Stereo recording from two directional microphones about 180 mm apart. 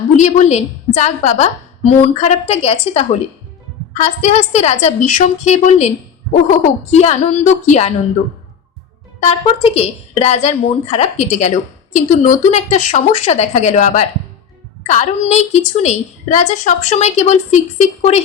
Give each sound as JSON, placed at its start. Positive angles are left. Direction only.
{"t": 0.2, "sound": "a woman's voice", "side_deg": 40}
{"t": 9.2, "sound": "a woman's voice", "side_deg": 35}